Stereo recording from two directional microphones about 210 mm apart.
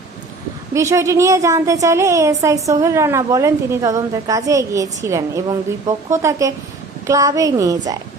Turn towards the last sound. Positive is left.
turn(degrees=-15)  # may be behind; listen again after turning